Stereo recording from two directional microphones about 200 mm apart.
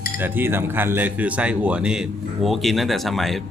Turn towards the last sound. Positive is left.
turn(degrees=0)  # may be behind; listen again after turning